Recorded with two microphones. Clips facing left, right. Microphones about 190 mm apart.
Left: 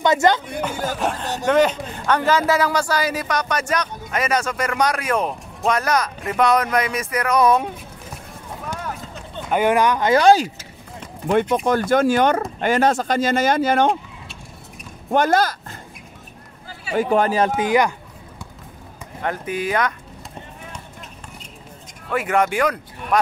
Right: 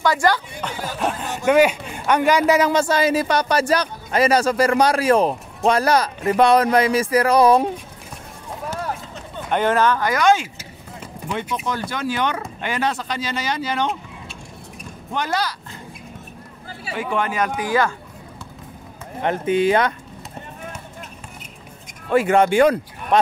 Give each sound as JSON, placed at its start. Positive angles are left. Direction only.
{"t": 0.0, "sound": "speech", "side_deg": 20}
{"t": 0.6, "sound": "speech", "side_deg": 5}
{"t": 1.0, "sound": "speech", "side_deg": -10}
{"t": 9.5, "sound": "speech", "side_deg": 10}
{"t": 10.1, "sound": "a man's voice", "side_deg": 35}
{"t": 11.2, "sound": "speech", "side_deg": 50}
{"t": 15.0, "sound": "speech", "side_deg": 50}
{"t": 16.9, "sound": "a man's voice", "side_deg": 40}
{"t": 17.6, "sound": "speech", "side_deg": 20}
{"t": 19.2, "sound": "speech", "side_deg": -25}
{"t": 22.1, "sound": "speech", "side_deg": -30}